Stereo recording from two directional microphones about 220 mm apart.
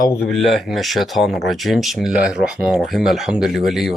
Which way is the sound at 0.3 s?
Centre (ahead or behind).